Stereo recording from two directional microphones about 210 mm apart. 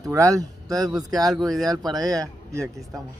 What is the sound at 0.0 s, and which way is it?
Speech, 15° right (ahead or behind).